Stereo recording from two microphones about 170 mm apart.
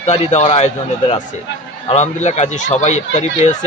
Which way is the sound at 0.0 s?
40° left (ahead or behind).